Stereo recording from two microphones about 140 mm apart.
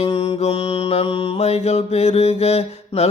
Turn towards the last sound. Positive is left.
turn(degrees=50)  # may be behind; listen again after turning